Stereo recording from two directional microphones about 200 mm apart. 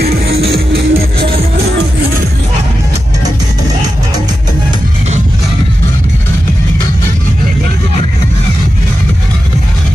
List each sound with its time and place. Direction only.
0.0 s music: 50° right (ahead or behind)